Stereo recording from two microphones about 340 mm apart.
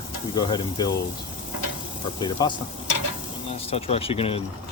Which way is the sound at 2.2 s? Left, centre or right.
Centre.